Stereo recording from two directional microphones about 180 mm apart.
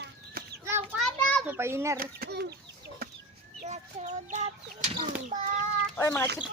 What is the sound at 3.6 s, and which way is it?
Speech, 40° right (ahead or behind).